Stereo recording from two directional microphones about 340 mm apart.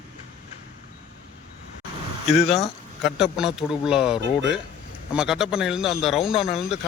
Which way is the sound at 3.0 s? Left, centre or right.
Centre.